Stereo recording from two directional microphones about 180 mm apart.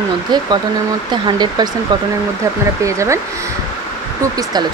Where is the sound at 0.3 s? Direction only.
25° right (ahead or behind).